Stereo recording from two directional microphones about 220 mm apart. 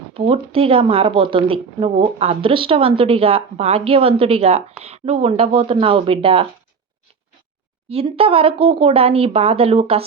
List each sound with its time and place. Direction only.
0.1 s speech: 25° right (ahead or behind)
7.9 s speech: 25° right (ahead or behind)